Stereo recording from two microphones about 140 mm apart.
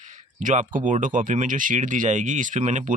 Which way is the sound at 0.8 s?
65° right (ahead or behind).